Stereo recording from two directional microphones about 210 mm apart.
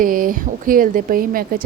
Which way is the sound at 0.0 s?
40° right (ahead or behind).